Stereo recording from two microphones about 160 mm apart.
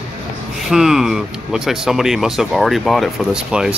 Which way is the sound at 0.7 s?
5° right (ahead or behind).